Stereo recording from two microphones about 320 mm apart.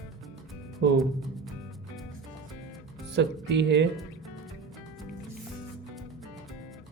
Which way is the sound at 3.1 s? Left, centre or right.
Right.